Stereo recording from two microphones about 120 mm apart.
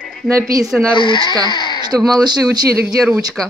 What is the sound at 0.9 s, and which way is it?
Speech, 40° left (ahead or behind).